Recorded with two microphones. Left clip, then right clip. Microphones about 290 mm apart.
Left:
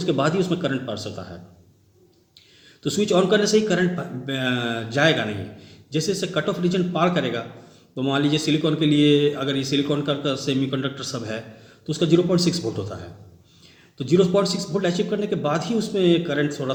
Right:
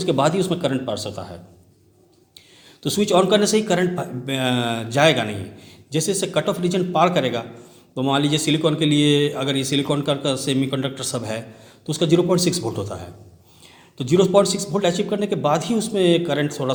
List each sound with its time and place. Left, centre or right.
0.0 s a man's voice: right
2.8 s a man's voice: right